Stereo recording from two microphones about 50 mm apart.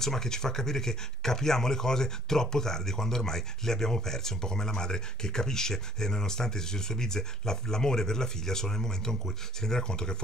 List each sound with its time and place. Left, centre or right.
0.0 s speech: centre